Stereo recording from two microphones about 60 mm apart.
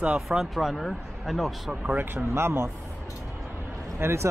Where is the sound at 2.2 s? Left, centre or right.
Right.